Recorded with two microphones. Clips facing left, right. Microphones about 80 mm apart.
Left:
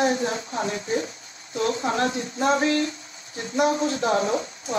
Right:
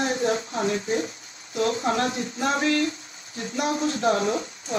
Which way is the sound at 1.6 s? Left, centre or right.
Left.